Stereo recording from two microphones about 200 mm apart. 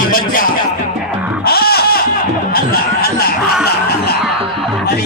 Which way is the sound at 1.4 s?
50° left (ahead or behind).